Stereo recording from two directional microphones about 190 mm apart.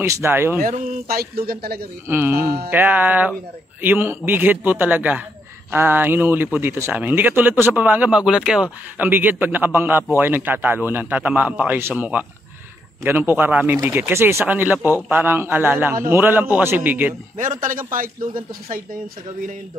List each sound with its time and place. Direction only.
0.0 s speech: 15° right (ahead or behind)
0.6 s a man's voice: 50° right (ahead or behind)
2.0 s speech: 10° right (ahead or behind)
2.4 s a man's voice: 55° right (ahead or behind)
2.7 s speech: 10° right (ahead or behind)
17.4 s speech: 45° right (ahead or behind)